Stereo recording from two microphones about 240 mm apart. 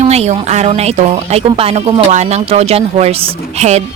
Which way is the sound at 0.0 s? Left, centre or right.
Right.